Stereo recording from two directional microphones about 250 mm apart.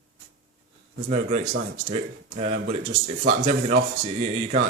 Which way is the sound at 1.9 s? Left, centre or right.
Right.